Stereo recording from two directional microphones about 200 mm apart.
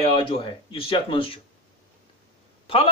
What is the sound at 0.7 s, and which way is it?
Speech, 25° left (ahead or behind).